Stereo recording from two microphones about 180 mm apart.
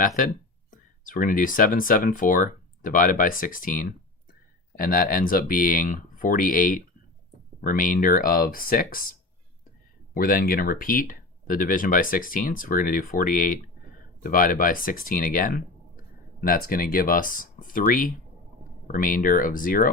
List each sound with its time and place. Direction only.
0.7 s speech: 50° left (ahead or behind)
10.2 s speech: 50° left (ahead or behind)